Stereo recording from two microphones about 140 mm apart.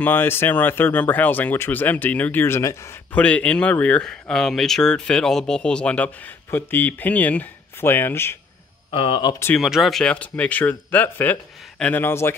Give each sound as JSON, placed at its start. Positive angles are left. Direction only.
{"t": 0.0, "sound": "speech", "side_deg": 15}
{"t": 3.1, "sound": "speech", "side_deg": 10}
{"t": 8.9, "sound": "speech", "side_deg": 35}
{"t": 9.6, "sound": "speech", "side_deg": 0}